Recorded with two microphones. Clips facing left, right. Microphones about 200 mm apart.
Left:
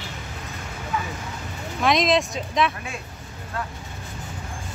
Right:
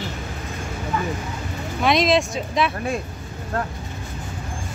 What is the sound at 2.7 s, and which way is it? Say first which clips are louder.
Speech: right 9 dB; 40° right (ahead or behind).